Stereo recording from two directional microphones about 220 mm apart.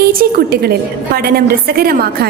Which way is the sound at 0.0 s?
45° right (ahead or behind).